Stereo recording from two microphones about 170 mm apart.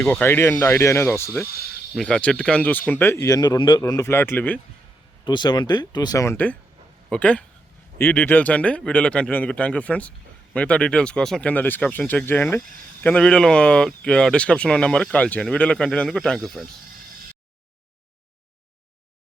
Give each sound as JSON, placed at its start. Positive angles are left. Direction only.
{"t": 0.0, "sound": "speech", "side_deg": 10}
{"t": 5.2, "sound": "speech", "side_deg": 25}